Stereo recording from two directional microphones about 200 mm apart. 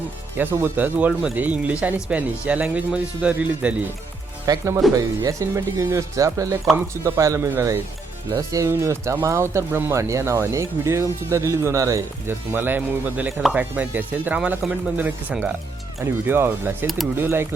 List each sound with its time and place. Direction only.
0.3 s speech: 10° right (ahead or behind)
4.4 s speech: 15° right (ahead or behind)